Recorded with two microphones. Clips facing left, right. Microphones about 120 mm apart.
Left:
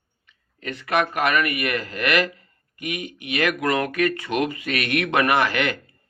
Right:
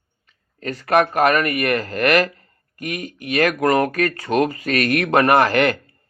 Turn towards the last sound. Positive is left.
turn(degrees=-45)  # may be behind; listen again after turning